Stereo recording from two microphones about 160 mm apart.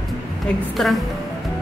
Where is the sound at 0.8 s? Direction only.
5° left (ahead or behind).